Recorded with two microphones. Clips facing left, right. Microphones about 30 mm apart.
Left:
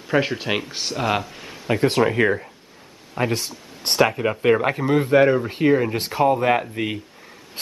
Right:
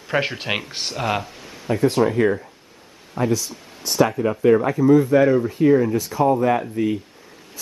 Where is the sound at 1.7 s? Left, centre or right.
Left.